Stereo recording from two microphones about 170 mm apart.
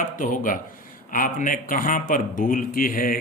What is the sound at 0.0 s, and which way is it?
Speech, 50° left (ahead or behind).